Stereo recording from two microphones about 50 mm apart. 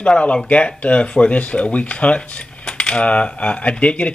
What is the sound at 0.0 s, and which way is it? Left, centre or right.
Speech, left.